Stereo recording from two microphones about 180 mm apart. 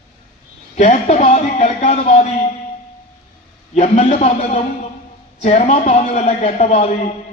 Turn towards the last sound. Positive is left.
turn(degrees=35)  # may be behind; listen again after turning